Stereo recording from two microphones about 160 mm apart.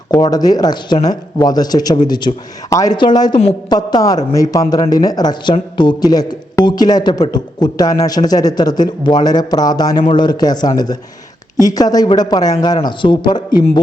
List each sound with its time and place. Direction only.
0.1 s a man's voice: 25° left (ahead or behind)